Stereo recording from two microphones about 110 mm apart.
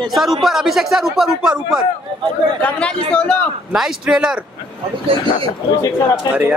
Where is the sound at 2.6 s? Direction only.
10° left (ahead or behind).